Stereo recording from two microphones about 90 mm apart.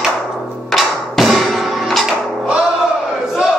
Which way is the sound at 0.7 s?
Centre (ahead or behind).